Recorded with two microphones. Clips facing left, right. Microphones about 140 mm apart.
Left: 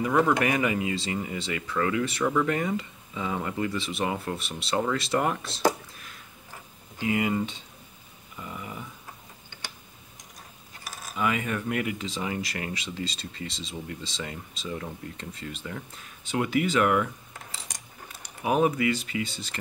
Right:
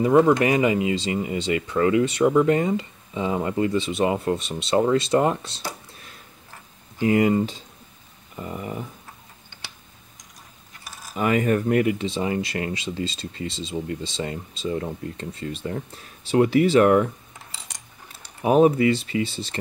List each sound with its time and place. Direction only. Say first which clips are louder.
0.0 s speech: right 6 dB; 25° right (ahead or behind)
7.0 s speech: right 7 dB; 45° right (ahead or behind)
8.4 s a sound: right 7 dB; 45° right (ahead or behind)
11.1 s speech: right 7 dB; 45° right (ahead or behind)
18.2 s speech: right 7 dB; 35° right (ahead or behind)